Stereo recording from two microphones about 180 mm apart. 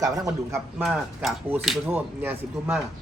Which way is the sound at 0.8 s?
Centre (ahead or behind).